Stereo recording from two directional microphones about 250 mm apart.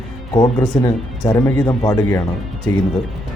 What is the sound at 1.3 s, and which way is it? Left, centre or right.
Speech, centre.